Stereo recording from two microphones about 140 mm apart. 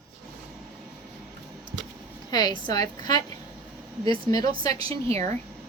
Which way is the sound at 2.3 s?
30° left (ahead or behind).